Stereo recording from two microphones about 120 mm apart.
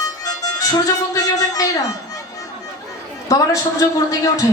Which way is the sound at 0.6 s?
30° left (ahead or behind).